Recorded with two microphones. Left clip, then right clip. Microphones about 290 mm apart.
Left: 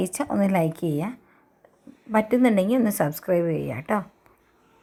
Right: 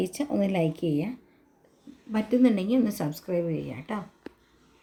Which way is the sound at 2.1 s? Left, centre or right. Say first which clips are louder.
Left 4 dB; centre.